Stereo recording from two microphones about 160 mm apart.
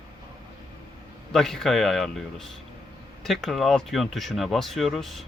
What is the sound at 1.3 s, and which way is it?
Speech, 5° left (ahead or behind).